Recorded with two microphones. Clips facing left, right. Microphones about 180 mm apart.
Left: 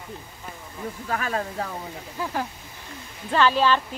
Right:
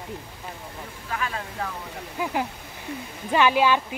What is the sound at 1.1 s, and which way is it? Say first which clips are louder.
Speech: left 3 dB; 45° left (ahead or behind).